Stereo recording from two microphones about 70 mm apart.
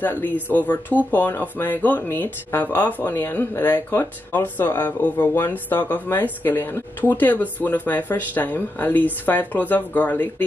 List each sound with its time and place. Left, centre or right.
0.0 s speech: left